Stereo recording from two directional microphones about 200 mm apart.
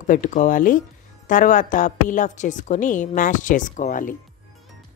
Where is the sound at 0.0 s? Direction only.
40° left (ahead or behind).